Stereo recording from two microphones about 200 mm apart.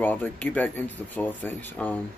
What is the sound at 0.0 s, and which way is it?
Speech, 10° left (ahead or behind).